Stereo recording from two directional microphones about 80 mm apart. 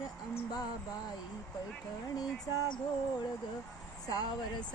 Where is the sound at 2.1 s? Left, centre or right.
Left.